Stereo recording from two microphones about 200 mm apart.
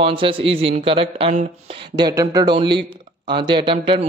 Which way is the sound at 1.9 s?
20° right (ahead or behind).